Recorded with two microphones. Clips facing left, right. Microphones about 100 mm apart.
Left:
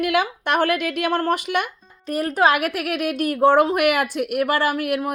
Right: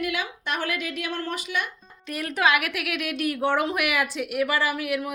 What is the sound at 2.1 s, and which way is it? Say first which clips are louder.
A woman's voice: left 5 dB; 40° left (ahead or behind).